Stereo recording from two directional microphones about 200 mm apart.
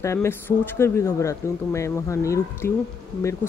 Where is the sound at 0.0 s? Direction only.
15° left (ahead or behind).